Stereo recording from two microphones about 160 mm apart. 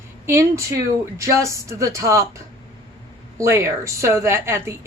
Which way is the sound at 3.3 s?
20° right (ahead or behind).